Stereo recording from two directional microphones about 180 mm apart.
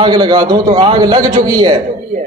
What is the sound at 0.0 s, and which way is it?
A man's voice, 25° right (ahead or behind).